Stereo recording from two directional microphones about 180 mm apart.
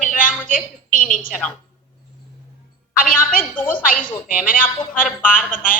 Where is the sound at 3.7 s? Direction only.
50° left (ahead or behind).